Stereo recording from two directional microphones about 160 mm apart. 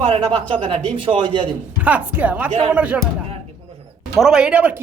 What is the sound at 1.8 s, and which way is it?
A woman's voice, 10° right (ahead or behind).